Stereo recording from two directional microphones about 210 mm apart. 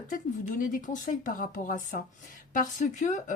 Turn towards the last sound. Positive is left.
turn(degrees=35)  # may be behind; listen again after turning